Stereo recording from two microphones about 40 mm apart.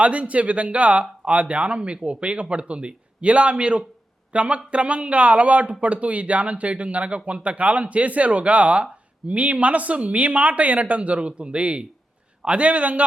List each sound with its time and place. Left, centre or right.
0.0 s speech: right